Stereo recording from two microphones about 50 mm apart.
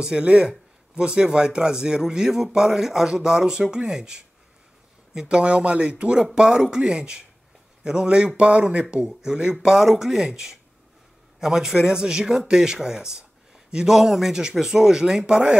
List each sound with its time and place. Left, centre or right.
0.0 s a man's voice: centre
8.9 s a man's voice: centre
13.9 s a man's voice: centre